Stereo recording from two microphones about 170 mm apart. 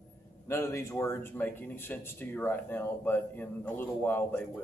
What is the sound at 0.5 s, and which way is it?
Speech, 15° left (ahead or behind).